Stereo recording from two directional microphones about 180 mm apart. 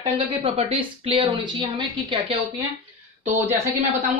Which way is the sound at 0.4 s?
30° right (ahead or behind).